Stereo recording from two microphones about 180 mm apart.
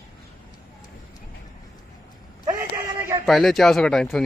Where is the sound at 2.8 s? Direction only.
15° right (ahead or behind).